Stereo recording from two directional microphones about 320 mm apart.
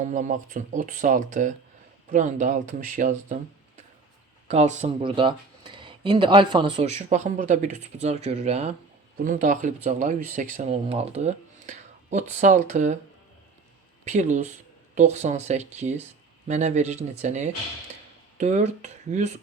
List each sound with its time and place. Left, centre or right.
0.0 s speech: right
4.4 s speech: right
14.0 s speech: right